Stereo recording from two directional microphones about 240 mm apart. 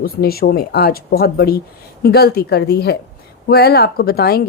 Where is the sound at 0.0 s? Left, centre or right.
Left.